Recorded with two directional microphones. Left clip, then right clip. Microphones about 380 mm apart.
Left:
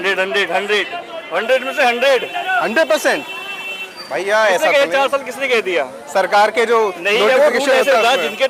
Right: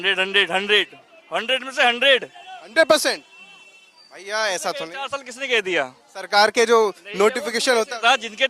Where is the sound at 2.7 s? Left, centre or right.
Centre.